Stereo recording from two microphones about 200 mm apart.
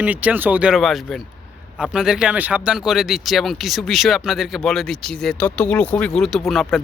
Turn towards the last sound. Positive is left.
turn(degrees=0)  # may be behind; listen again after turning